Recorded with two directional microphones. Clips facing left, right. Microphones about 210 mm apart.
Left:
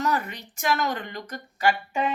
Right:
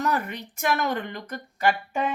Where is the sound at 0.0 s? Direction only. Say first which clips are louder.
Even; 55° right (ahead or behind).